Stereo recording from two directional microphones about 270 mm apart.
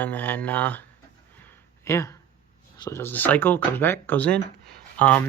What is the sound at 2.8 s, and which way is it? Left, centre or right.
Speech, centre.